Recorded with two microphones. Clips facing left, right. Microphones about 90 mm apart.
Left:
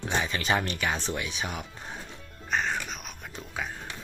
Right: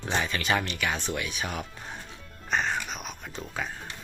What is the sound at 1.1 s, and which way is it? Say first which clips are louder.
Speech: right 1 dB; 25° left (ahead or behind).